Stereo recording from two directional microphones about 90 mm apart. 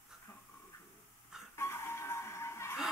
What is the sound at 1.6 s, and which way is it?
Music, 30° left (ahead or behind).